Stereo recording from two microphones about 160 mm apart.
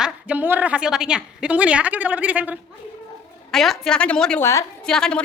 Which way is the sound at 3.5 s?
Centre (ahead or behind).